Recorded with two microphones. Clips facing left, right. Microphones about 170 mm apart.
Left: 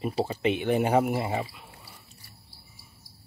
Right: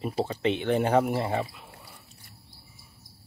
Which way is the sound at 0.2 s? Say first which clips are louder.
Even; 10° left (ahead or behind).